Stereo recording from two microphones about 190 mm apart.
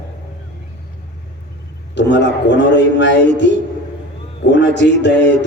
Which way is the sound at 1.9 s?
65° left (ahead or behind).